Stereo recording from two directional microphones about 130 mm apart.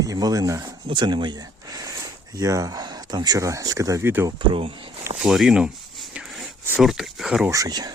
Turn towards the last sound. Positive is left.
turn(degrees=-30)  # may be behind; listen again after turning